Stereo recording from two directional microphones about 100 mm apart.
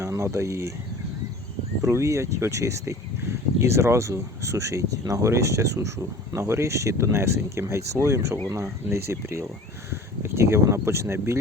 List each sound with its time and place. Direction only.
0.0 s speech: 30° right (ahead or behind)
1.8 s speech: 30° right (ahead or behind)